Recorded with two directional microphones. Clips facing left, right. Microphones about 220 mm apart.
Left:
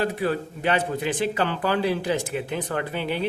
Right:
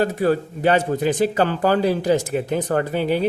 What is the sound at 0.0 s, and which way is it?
Speech, 45° right (ahead or behind).